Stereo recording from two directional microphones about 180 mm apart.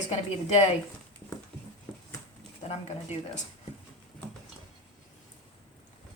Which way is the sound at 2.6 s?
40° left (ahead or behind).